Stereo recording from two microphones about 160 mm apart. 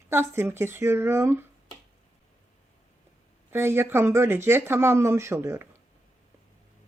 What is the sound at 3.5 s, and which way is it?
Speech, 15° right (ahead or behind).